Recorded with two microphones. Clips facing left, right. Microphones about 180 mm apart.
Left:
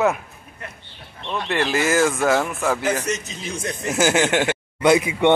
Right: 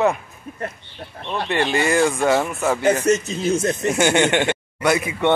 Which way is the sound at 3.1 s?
45° right (ahead or behind).